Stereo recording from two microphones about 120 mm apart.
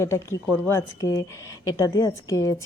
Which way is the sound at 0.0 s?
20° left (ahead or behind).